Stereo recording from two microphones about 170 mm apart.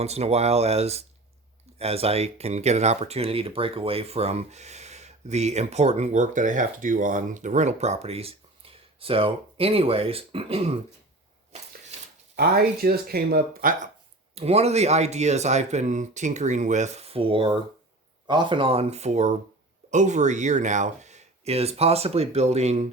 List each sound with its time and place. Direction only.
0.0 s speech: 40° right (ahead or behind)
12.4 s speech: 65° right (ahead or behind)
14.3 s speech: 40° right (ahead or behind)